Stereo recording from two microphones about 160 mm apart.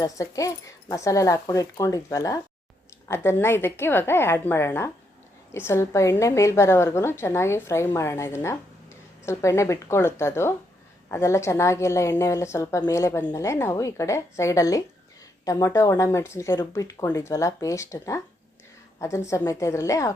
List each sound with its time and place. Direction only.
0.0 s a woman's voice: 20° left (ahead or behind)